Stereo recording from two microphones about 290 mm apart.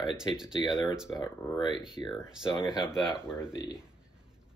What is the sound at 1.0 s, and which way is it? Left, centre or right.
Speech, centre.